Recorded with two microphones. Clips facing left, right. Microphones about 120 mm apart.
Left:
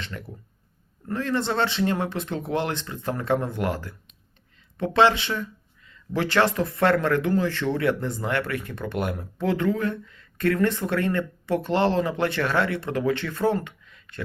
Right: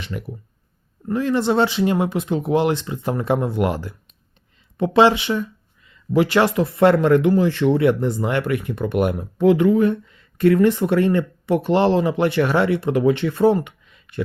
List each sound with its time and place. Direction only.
0.0 s speech: 15° right (ahead or behind)